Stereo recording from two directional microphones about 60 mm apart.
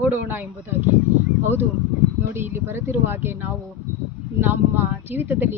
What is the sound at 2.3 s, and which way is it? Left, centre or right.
Speech, right.